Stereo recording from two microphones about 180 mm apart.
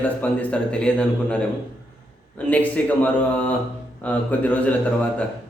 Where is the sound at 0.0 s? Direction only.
10° left (ahead or behind).